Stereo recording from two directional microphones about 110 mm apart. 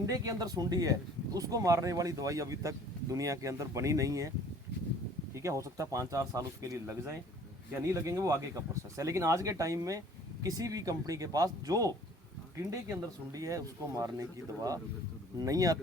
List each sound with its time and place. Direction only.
0.0 s speech: 30° right (ahead or behind)